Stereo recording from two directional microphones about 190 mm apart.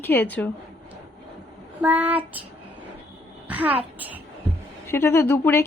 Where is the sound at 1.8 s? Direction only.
10° right (ahead or behind).